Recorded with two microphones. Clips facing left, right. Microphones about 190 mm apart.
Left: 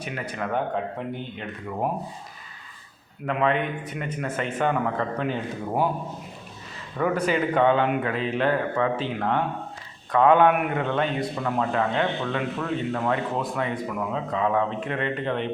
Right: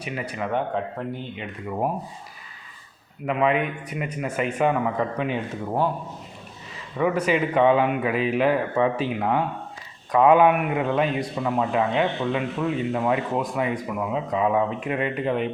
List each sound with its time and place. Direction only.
0.0 s speech: 5° right (ahead or behind)
3.2 s a man's voice: 5° right (ahead or behind)
6.9 s a man's voice: 5° right (ahead or behind)